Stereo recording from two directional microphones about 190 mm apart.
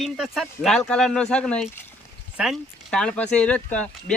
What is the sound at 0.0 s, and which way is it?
Speech, centre (ahead or behind).